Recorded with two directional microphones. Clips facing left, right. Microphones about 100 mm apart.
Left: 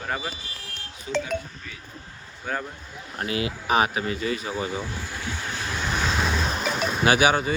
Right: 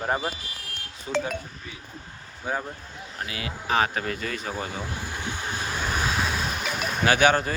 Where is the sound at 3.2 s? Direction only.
30° left (ahead or behind).